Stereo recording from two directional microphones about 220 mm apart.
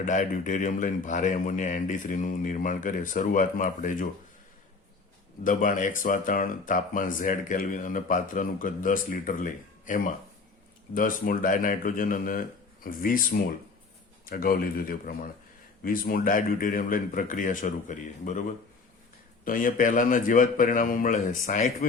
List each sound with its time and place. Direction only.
0.0 s speech: 35° left (ahead or behind)
5.4 s speech: 35° left (ahead or behind)
19.5 s speech: 40° left (ahead or behind)